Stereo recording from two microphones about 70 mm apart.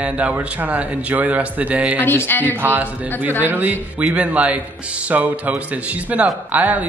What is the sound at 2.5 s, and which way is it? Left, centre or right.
A man's voice, right.